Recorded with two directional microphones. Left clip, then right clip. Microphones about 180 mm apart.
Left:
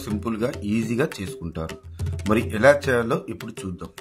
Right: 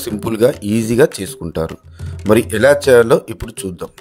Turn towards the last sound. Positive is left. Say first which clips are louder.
# right 8 dB
turn(degrees=-55)  # may be behind; listen again after turning